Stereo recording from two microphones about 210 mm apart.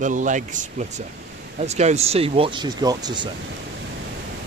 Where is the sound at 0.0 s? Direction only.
35° right (ahead or behind); by 3.3 s 20° right (ahead or behind).